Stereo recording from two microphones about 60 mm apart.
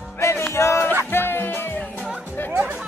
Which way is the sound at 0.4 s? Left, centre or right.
Left.